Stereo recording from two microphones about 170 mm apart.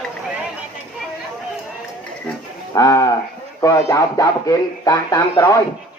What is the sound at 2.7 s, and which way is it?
Speech, 20° left (ahead or behind).